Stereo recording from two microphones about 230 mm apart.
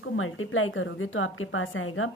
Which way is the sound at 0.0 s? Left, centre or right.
Left.